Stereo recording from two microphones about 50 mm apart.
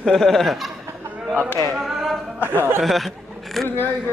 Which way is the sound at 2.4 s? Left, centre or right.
Right.